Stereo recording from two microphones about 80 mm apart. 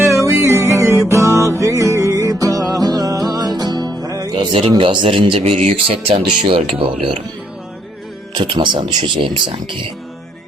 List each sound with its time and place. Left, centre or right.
0.0 s music: right
4.4 s speech: right
8.4 s speech: right